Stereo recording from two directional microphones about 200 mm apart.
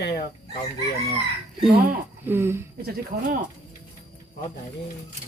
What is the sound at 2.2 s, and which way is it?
Speech, 10° right (ahead or behind).